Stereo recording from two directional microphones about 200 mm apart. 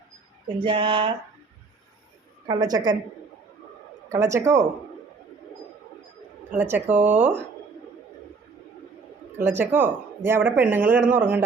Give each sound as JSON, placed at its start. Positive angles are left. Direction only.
{"t": 0.6, "sound": "speech", "side_deg": -25}
{"t": 2.5, "sound": "speech", "side_deg": -20}
{"t": 4.1, "sound": "speech", "side_deg": -15}
{"t": 6.6, "sound": "speech", "side_deg": -10}
{"t": 9.4, "sound": "speech", "side_deg": -10}